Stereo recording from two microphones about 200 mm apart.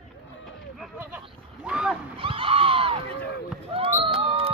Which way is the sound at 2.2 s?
25° right (ahead or behind).